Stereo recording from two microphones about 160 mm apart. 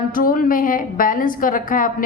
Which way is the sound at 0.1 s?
60° left (ahead or behind).